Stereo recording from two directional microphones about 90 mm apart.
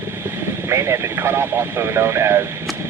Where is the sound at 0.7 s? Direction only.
30° right (ahead or behind).